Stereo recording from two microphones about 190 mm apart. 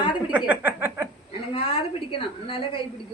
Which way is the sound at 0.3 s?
10° right (ahead or behind).